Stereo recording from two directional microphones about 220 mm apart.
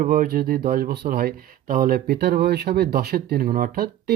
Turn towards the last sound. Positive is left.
turn(degrees=-40)  # may be behind; listen again after turning